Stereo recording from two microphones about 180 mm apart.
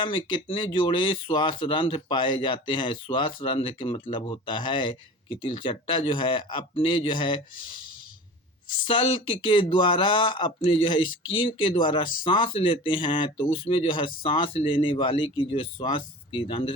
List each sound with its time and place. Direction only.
0.0 s speech: 25° left (ahead or behind)
8.8 s speech: 30° left (ahead or behind)